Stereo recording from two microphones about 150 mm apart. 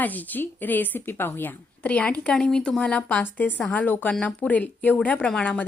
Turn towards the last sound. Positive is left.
turn(degrees=10)  # may be behind; listen again after turning